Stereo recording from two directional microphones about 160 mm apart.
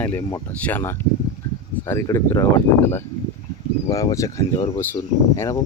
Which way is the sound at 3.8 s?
20° left (ahead or behind).